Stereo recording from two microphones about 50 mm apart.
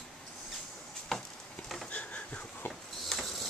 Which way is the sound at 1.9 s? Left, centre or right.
Left.